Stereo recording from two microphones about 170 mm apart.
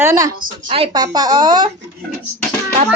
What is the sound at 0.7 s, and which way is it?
Speech, 30° right (ahead or behind).